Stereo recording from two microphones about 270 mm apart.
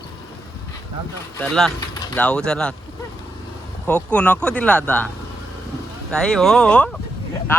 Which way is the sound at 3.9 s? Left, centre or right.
Centre.